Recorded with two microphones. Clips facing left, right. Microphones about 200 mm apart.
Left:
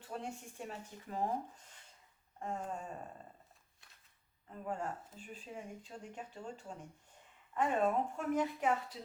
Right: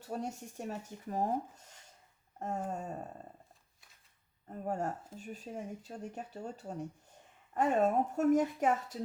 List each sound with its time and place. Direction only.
0.0 s speech: 40° right (ahead or behind)
2.4 s a woman's voice: 40° right (ahead or behind)
4.4 s a woman's voice: 40° right (ahead or behind)